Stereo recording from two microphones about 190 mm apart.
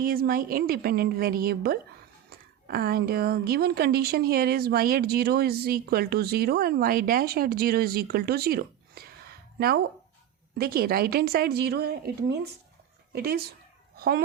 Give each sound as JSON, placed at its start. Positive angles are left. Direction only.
{"t": 0.0, "sound": "a woman's voice", "side_deg": -50}
{"t": 13.9, "sound": "dog", "side_deg": -55}